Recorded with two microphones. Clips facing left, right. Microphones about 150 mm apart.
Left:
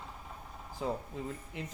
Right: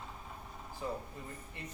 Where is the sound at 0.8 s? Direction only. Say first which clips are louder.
Left 5 dB; 90° left.